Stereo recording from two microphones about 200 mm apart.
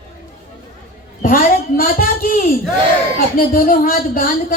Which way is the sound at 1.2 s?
45° left (ahead or behind).